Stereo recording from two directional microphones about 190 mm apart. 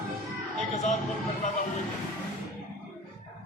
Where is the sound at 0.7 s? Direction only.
35° left (ahead or behind).